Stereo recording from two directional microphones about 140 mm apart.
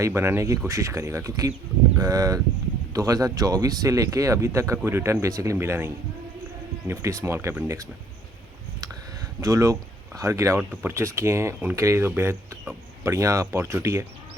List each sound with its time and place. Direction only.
0.0 s speech: 20° right (ahead or behind)
9.4 s speech: 25° right (ahead or behind)
10.6 s speech: 10° right (ahead or behind)
10.9 s speech: 20° right (ahead or behind)